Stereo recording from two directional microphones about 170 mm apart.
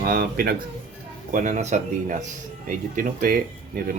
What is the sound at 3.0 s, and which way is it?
Speech, 55° right (ahead or behind).